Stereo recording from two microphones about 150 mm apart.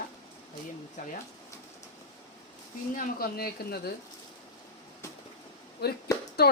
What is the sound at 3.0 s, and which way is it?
Speech, 85° left.